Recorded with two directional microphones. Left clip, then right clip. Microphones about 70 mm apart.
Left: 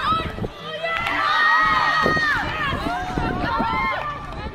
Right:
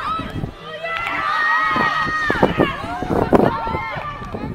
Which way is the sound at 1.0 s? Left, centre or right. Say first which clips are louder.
Even; left.